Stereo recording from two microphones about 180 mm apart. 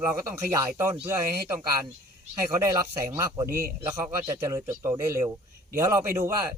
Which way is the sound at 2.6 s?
15° right (ahead or behind).